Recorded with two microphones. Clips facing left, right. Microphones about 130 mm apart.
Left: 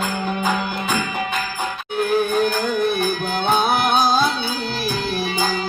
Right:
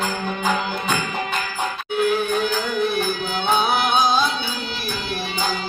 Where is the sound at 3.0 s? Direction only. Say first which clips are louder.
Left 2 dB; 50° left (ahead or behind).